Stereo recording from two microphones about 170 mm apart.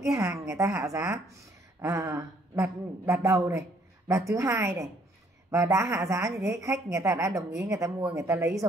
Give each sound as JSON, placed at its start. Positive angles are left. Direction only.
{"t": 0.0, "sound": "a woman's voice", "side_deg": -15}